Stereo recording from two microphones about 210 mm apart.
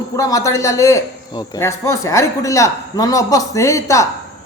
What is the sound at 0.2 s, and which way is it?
A man's voice, 15° left (ahead or behind).